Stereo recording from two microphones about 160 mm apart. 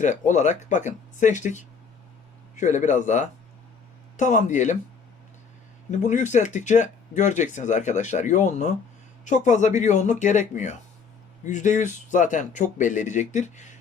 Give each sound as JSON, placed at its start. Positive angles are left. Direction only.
{"t": 0.0, "sound": "speech", "side_deg": 50}
{"t": 6.0, "sound": "speech", "side_deg": 50}